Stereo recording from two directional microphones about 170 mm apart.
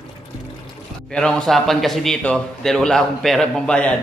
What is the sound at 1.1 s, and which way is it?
A man's voice, 5° left (ahead or behind).